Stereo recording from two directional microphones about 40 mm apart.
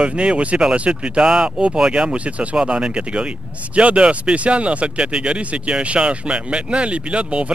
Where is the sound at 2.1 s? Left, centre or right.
Right.